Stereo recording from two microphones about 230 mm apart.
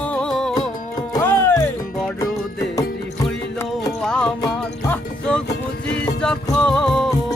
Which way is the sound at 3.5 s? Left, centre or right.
Centre.